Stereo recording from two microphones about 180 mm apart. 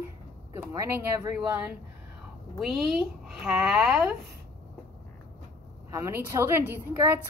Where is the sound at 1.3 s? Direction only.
10° right (ahead or behind).